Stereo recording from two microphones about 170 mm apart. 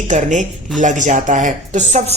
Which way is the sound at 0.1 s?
45° right (ahead or behind).